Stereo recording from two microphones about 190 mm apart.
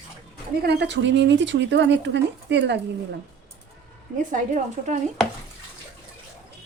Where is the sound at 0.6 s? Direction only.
60° right (ahead or behind).